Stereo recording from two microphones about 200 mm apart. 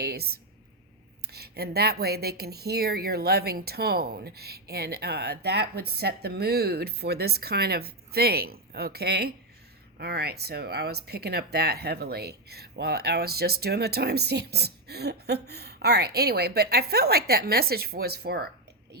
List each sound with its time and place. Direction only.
0.0 s speech: 50° right (ahead or behind)